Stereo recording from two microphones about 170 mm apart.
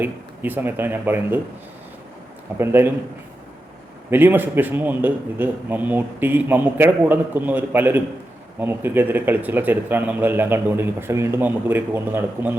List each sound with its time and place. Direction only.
0.0 s speech: 10° right (ahead or behind)
2.6 s speech: 15° right (ahead or behind)
4.1 s speech: 10° right (ahead or behind)